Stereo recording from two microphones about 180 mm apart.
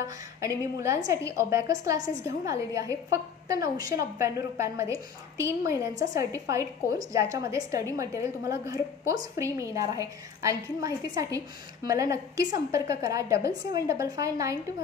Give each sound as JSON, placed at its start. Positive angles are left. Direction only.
{"t": 0.0, "sound": "a woman's voice", "side_deg": -20}